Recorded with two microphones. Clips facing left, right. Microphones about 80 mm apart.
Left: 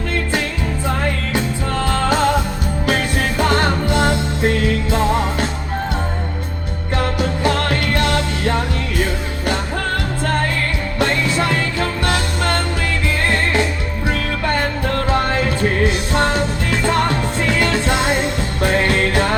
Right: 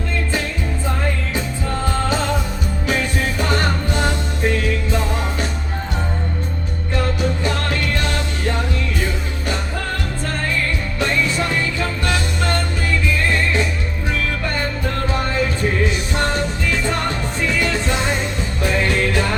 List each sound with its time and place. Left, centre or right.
1.8 s music: left
6.9 s music: left
11.0 s music: left